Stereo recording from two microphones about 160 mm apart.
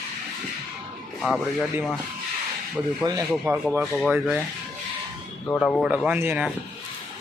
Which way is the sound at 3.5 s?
15° right (ahead or behind).